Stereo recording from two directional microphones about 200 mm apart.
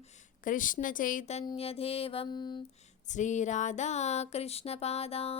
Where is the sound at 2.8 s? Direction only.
35° left (ahead or behind).